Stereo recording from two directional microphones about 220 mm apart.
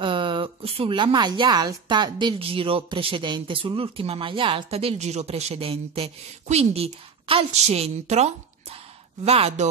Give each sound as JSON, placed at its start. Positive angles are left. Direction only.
{"t": 0.0, "sound": "a woman's voice", "side_deg": -20}